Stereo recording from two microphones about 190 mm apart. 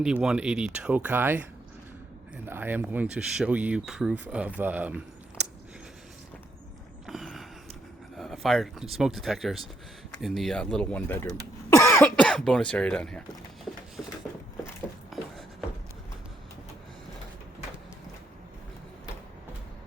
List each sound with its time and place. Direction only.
0.0 s speech: 5° right (ahead or behind)
2.5 s speech: 10° right (ahead or behind)
7.1 s creak: centre (ahead or behind)
8.1 s speech: centre (ahead or behind)
11.7 s cough: 15° left (ahead or behind)
12.0 s speech: 5° left (ahead or behind)
15.1 s a sound: centre (ahead or behind)